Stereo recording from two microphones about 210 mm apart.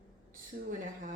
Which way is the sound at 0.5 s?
50° right (ahead or behind).